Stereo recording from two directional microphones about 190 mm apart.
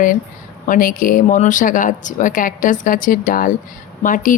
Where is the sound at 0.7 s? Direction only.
45° left (ahead or behind).